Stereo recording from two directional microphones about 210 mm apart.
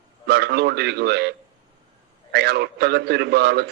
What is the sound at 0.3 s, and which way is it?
A man's voice, 50° right (ahead or behind).